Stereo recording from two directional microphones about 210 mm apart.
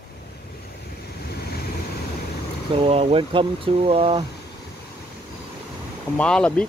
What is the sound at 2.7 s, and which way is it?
Speech, 25° right (ahead or behind).